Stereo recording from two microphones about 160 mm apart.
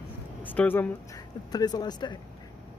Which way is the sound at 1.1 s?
25° left (ahead or behind).